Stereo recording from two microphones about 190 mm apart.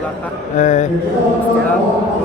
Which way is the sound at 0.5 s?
40° left (ahead or behind).